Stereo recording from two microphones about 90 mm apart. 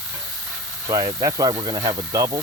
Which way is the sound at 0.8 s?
45° right (ahead or behind).